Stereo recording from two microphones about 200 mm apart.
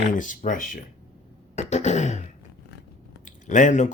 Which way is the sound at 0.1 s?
40° left (ahead or behind).